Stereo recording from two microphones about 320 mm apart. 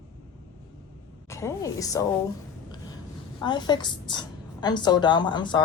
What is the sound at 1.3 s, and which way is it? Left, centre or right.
Speech, centre.